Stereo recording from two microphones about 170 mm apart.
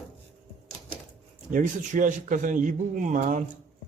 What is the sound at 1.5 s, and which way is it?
A man's voice, 50° right (ahead or behind).